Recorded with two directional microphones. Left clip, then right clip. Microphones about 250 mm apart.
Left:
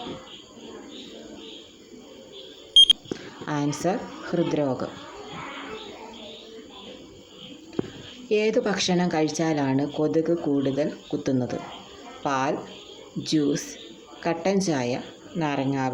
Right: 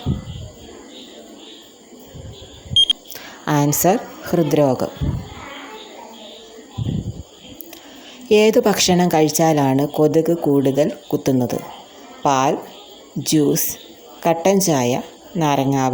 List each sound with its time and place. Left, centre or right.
2.7 s a sound: centre
3.1 s a woman's voice: right
8.3 s a woman's voice: right